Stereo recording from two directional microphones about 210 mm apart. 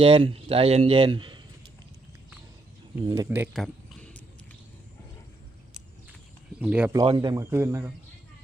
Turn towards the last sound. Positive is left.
turn(degrees=-10)  # may be behind; listen again after turning